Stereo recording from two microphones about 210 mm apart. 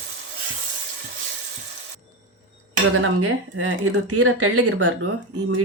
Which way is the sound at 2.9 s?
75° right (ahead or behind).